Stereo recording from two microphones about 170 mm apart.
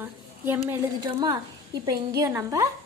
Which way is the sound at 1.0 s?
25° right (ahead or behind).